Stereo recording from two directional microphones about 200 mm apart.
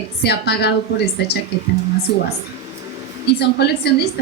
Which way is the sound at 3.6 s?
55° left (ahead or behind).